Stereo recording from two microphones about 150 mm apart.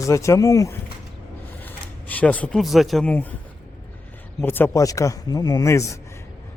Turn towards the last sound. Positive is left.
turn(degrees=20)  # may be behind; listen again after turning